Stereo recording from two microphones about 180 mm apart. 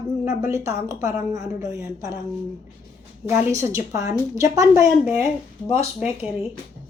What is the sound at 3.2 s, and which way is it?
Speech, 15° right (ahead or behind).